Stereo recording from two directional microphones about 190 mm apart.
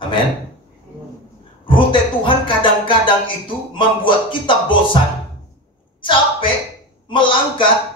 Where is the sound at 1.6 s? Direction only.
25° left (ahead or behind).